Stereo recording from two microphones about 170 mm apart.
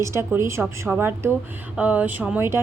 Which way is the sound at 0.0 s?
15° right (ahead or behind).